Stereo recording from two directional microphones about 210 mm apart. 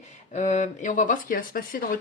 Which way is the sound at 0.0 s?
35° left (ahead or behind).